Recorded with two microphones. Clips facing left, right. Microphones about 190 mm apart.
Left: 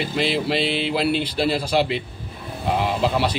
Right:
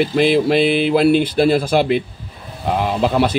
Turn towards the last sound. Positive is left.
turn(degrees=-50)  # may be behind; listen again after turning